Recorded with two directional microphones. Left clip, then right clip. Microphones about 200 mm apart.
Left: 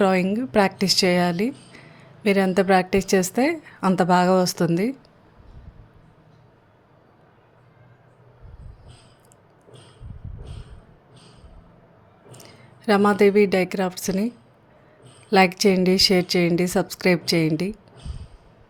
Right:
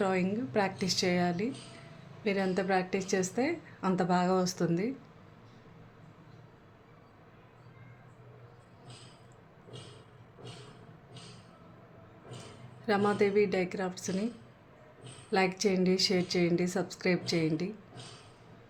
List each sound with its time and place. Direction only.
0.0 s a woman's voice: 45° left (ahead or behind)
12.8 s a woman's voice: 45° left (ahead or behind)
15.3 s a woman's voice: 45° left (ahead or behind)